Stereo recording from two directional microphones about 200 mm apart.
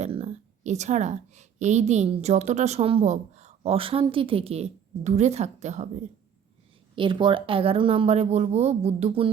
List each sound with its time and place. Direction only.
0.0 s a woman's voice: 30° right (ahead or behind)
6.9 s speech: 25° right (ahead or behind)